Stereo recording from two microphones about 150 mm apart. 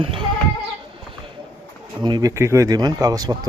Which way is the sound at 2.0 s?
30° right (ahead or behind).